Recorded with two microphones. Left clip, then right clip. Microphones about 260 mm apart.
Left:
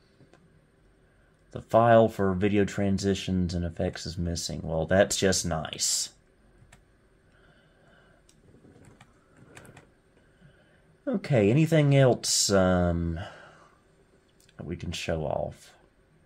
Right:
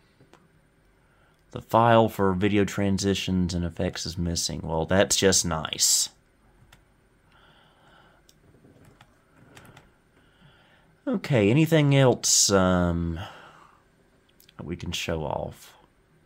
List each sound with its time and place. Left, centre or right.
1.5 s speech: right
11.1 s speech: right